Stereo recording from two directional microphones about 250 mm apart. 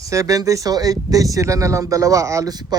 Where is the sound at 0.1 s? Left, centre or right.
Centre.